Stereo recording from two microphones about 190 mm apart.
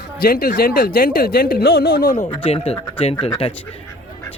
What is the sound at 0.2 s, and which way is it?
Speech, 50° left (ahead or behind).